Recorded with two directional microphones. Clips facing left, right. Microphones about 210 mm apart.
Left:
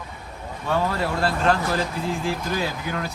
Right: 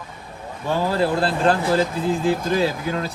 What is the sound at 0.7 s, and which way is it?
Speech, 30° right (ahead or behind).